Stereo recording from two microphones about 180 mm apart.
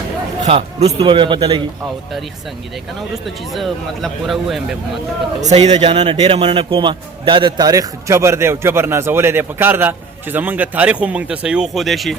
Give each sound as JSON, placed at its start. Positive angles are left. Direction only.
{"t": 0.4, "sound": "a man's voice", "side_deg": -35}
{"t": 3.2, "sound": "speech", "side_deg": 0}
{"t": 5.4, "sound": "a man's voice", "side_deg": -40}
{"t": 5.6, "sound": "a man's voice", "side_deg": -25}